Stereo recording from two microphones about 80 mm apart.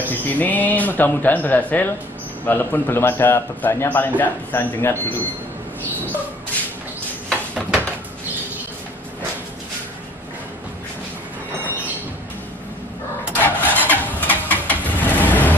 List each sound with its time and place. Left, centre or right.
0.0 s speech: left
13.4 s vehicle: left